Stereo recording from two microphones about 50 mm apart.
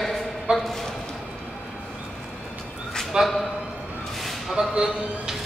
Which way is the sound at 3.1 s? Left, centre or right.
Centre.